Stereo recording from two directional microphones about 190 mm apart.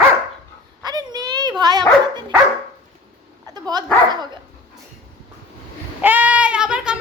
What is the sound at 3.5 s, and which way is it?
Dog, 20° right (ahead or behind).